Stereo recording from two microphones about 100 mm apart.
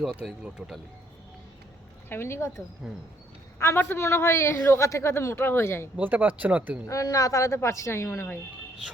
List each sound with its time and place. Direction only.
0.3 s speech: 5° right (ahead or behind)
2.0 s speech: 25° left (ahead or behind)
2.8 s speech: 5° right (ahead or behind)
3.6 s speech: 25° left (ahead or behind)
6.0 s speech: 15° right (ahead or behind)
6.8 s a woman's voice: 35° left (ahead or behind)